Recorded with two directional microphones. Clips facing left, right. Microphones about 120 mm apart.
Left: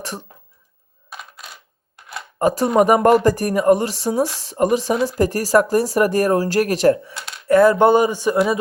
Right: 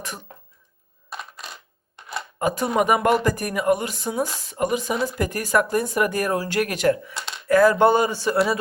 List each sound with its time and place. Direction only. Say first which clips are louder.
1.1 s coin: right 2 dB; centre (ahead or behind)
2.0 s a sound: right 2 dB; 5° left (ahead or behind)
2.4 s speech: left 6 dB; 35° left (ahead or behind)
7.4 s speech: left 3 dB; 25° left (ahead or behind)